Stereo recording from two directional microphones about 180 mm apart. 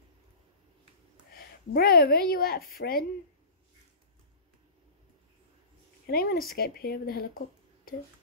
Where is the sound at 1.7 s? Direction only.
55° left (ahead or behind).